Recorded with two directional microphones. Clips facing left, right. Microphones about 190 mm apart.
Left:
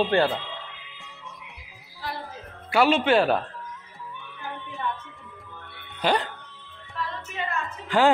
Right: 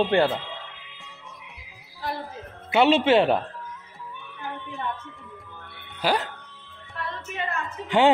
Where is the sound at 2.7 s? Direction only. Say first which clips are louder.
Right 2 dB; 25° right (ahead or behind).